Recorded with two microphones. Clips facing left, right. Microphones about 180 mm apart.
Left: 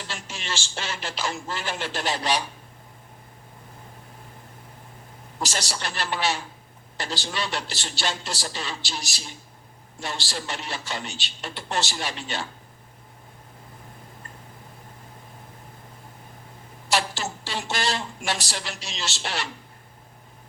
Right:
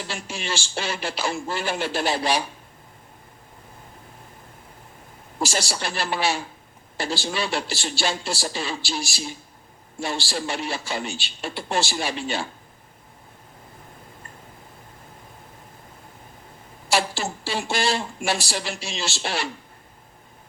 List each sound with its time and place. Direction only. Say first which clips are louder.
0.1 s a man's voice: right 3 dB; 10° right (ahead or behind)
5.4 s a man's voice: right 4 dB; 10° right (ahead or behind)
16.9 s a man's voice: right 2 dB; 10° right (ahead or behind)